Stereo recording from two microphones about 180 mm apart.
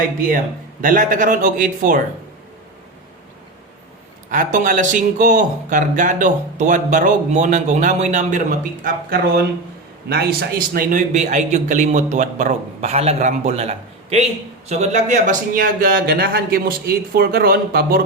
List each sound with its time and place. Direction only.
0.8 s speech: 50° right (ahead or behind)
4.3 s a man's voice: 45° right (ahead or behind)